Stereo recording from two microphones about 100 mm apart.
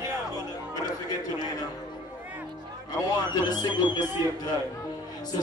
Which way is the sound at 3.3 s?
45° left (ahead or behind).